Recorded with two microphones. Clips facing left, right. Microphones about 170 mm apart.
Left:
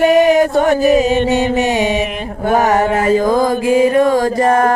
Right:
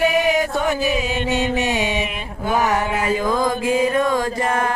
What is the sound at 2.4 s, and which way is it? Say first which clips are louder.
Mantra: left 7 dB; 50° left (ahead or behind).